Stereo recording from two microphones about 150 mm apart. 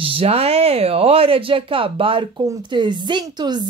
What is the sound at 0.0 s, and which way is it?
A woman's voice, 40° right (ahead or behind).